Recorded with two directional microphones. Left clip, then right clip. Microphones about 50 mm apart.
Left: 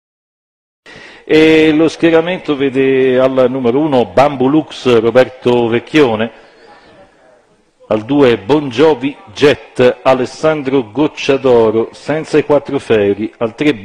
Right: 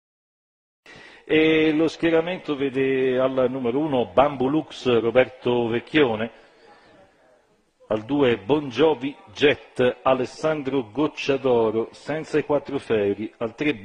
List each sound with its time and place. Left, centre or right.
1.2 s a man's voice: right
7.9 s a man's voice: right